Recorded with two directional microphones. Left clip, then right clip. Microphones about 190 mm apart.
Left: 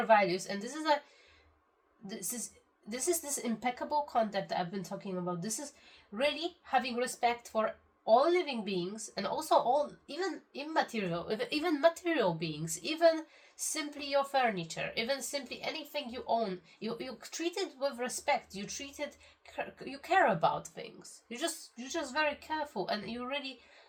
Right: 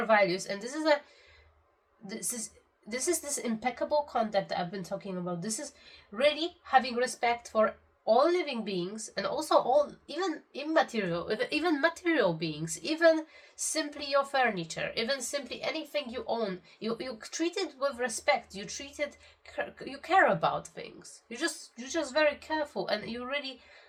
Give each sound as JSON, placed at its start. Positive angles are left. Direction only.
{"t": 0.1, "sound": "a woman's voice", "side_deg": -15}
{"t": 2.0, "sound": "a woman's voice", "side_deg": -15}
{"t": 6.7, "sound": "a woman's voice", "side_deg": -15}